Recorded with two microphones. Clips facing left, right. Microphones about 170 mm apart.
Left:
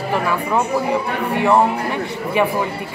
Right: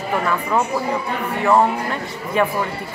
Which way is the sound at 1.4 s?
15° left (ahead or behind).